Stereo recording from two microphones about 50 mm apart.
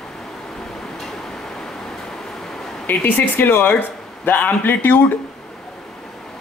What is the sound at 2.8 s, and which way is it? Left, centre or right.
Speech, left.